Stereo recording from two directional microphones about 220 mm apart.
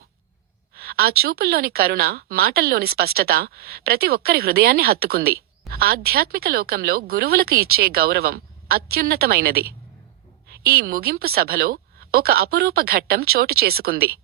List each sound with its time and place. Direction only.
0.8 s a woman's voice: 45° right (ahead or behind)
10.7 s a woman's voice: 45° right (ahead or behind)